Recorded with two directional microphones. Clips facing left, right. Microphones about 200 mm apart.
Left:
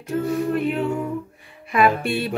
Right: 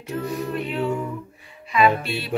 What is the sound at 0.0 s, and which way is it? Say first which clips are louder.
A capella: left 5 dB; 50° left (ahead or behind).